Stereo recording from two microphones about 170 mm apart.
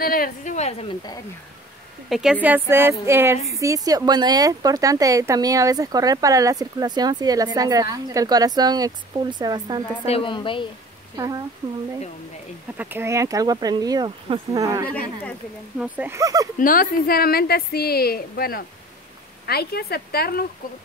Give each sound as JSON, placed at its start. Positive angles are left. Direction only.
{"t": 0.0, "sound": "a woman's voice", "side_deg": 60}
{"t": 0.8, "sound": "speech", "side_deg": 25}
{"t": 2.0, "sound": "speech", "side_deg": 0}
{"t": 2.4, "sound": "music", "side_deg": -10}
{"t": 3.5, "sound": "speech", "side_deg": -20}
{"t": 10.0, "sound": "a woman's voice", "side_deg": 30}
{"t": 11.1, "sound": "speech", "side_deg": -20}
{"t": 12.7, "sound": "speech", "side_deg": -10}
{"t": 15.8, "sound": "music", "side_deg": -10}
{"t": 16.5, "sound": "a woman's voice", "side_deg": 55}